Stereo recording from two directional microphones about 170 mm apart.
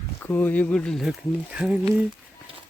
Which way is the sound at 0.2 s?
10° left (ahead or behind).